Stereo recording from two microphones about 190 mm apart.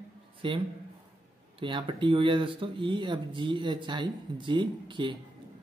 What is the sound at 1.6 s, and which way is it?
Speech, 25° right (ahead or behind).